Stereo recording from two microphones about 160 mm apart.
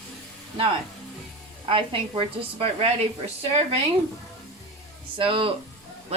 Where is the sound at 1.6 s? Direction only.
35° right (ahead or behind).